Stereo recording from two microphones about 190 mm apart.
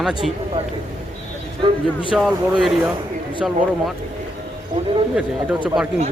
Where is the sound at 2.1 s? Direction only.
Centre (ahead or behind).